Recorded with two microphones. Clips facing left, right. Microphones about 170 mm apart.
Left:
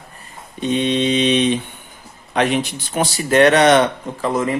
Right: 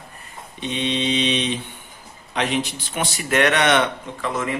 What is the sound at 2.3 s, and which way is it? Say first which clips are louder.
Speech: left 6 dB; 55° left (ahead or behind).